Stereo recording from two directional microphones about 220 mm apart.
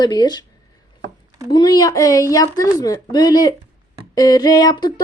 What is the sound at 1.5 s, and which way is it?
A woman's voice, 20° left (ahead or behind).